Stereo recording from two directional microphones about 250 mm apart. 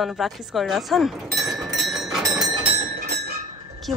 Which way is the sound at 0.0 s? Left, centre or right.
Centre.